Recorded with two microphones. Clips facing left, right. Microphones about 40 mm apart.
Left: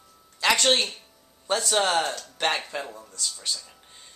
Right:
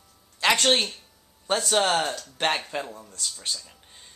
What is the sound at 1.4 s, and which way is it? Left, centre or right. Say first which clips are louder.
Music: even; right.